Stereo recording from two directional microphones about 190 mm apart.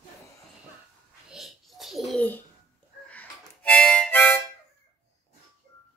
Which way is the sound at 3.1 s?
5° left (ahead or behind).